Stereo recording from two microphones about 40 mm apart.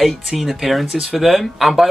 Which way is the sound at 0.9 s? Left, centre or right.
Centre.